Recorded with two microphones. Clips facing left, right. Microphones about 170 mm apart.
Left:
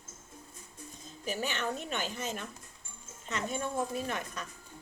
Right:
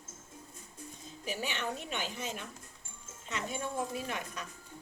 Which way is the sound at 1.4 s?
45° left (ahead or behind).